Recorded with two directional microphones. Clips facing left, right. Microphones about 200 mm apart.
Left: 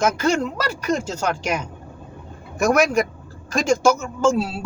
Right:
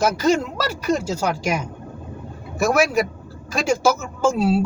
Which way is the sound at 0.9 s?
10° right (ahead or behind).